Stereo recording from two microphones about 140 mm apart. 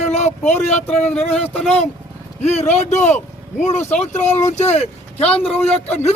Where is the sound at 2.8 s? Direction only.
55° left (ahead or behind).